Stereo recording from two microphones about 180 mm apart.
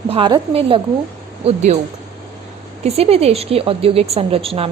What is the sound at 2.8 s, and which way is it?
A woman's voice, 35° right (ahead or behind).